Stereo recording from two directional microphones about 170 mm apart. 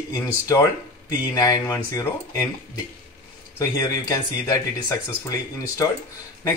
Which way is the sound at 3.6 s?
20° left (ahead or behind).